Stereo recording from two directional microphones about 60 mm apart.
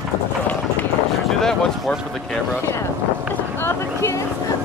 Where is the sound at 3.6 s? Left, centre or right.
Left.